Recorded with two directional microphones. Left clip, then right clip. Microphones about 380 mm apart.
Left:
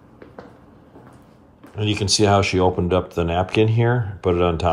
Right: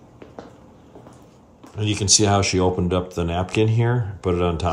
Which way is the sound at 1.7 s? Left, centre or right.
Centre.